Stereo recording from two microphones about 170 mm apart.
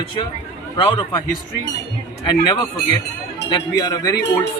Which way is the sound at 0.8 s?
30° left (ahead or behind).